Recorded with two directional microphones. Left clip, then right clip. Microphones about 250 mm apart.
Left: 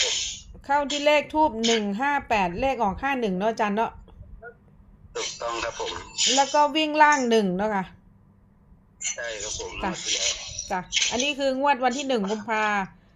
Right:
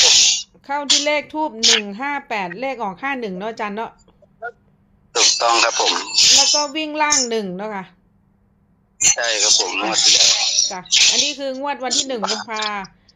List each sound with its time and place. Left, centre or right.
0.0 s a sound: right
0.6 s a woman's voice: centre
5.1 s speech: right
6.6 s a woman's voice: centre
9.0 s speech: right
11.3 s a woman's voice: centre
12.2 s speech: right
12.5 s a woman's voice: centre